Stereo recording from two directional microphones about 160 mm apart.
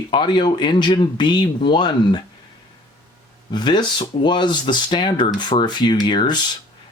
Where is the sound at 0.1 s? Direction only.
30° left (ahead or behind).